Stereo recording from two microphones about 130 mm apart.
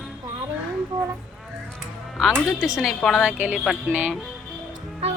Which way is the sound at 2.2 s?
Centre (ahead or behind).